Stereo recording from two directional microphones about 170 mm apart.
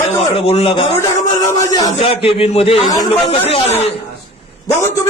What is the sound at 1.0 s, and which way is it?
Speech, 20° left (ahead or behind).